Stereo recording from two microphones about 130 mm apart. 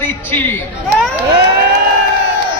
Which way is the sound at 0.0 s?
15° left (ahead or behind).